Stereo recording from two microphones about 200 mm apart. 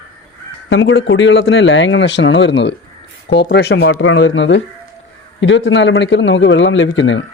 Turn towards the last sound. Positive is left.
turn(degrees=65)  # may be behind; listen again after turning